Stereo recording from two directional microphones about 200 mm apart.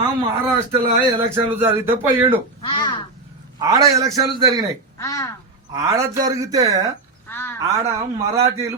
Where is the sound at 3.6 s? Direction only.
15° right (ahead or behind).